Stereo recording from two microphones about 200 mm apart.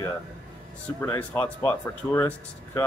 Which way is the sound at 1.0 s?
10° left (ahead or behind).